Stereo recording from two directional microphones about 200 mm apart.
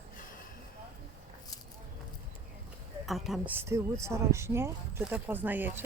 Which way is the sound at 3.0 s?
Centre (ahead or behind).